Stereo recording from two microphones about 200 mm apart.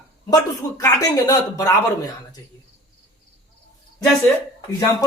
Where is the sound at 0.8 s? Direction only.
15° left (ahead or behind).